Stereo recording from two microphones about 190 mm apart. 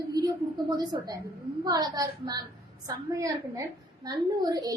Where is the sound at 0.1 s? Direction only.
20° right (ahead or behind).